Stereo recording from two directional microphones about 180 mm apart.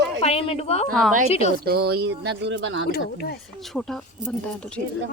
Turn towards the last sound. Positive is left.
turn(degrees=5)  # may be behind; listen again after turning